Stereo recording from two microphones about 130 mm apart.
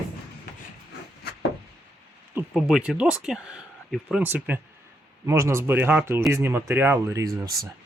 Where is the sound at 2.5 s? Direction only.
5° right (ahead or behind).